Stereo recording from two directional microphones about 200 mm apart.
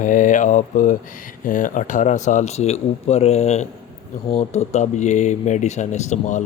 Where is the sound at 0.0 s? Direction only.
40° left (ahead or behind).